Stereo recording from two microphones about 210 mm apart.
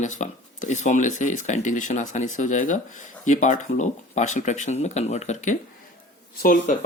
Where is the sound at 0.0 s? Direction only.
35° left (ahead or behind).